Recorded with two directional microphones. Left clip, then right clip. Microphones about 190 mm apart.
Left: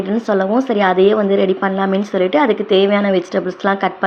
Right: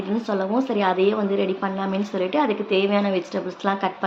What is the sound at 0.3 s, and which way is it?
A woman's voice, 30° left (ahead or behind).